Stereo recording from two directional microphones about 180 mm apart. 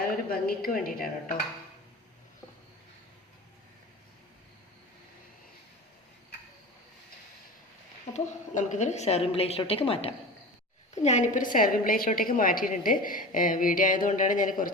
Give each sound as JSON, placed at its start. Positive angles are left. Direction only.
{"t": 0.3, "sound": "a woman's voice", "side_deg": 55}
{"t": 8.1, "sound": "a woman's voice", "side_deg": 45}